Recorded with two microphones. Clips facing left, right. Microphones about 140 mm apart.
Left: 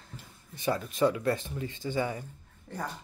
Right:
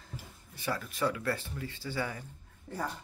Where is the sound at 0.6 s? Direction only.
20° left (ahead or behind).